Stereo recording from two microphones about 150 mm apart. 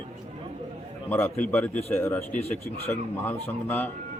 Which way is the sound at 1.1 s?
15° left (ahead or behind).